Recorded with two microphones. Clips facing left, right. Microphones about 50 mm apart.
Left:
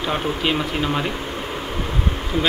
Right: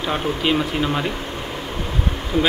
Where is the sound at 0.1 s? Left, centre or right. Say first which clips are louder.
Right 2 dB; centre.